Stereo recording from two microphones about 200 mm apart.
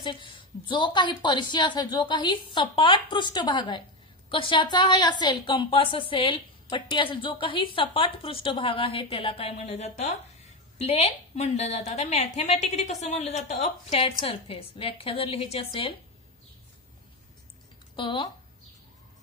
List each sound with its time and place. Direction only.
0.0 s a woman's voice: 25° left (ahead or behind)
17.9 s a woman's voice: 25° left (ahead or behind)